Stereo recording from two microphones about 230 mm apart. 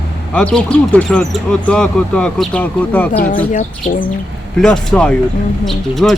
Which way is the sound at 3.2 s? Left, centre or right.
Left.